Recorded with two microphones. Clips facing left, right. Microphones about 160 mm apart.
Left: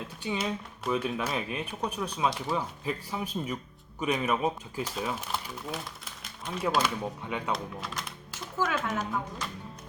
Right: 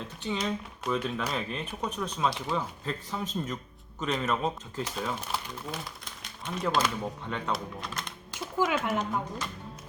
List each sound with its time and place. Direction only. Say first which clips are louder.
0.2 s speech: even; 10° left (ahead or behind)
7.5 s speech: even; centre (ahead or behind)
8.5 s speech: right 2 dB; 15° right (ahead or behind)